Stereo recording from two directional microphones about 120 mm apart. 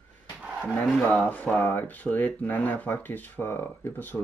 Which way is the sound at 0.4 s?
10° right (ahead or behind).